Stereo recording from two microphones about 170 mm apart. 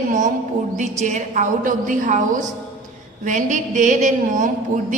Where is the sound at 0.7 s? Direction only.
45° right (ahead or behind).